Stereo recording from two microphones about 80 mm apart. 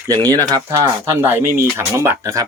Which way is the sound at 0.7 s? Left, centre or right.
Right.